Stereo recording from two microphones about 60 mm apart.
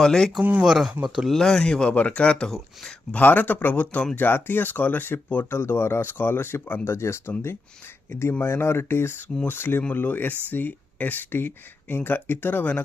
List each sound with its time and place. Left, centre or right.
0.0 s speech: centre
0.6 s speech: centre
1.3 s speech: centre
3.1 s speech: left
6.9 s speech: left